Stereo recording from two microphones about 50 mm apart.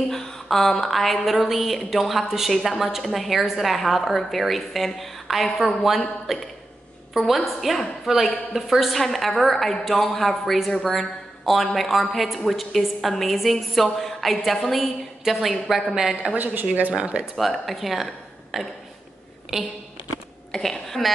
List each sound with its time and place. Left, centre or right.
0.1 s a woman's voice: centre
16.9 s speech: right
17.4 s a woman's voice: centre
20.5 s speech: centre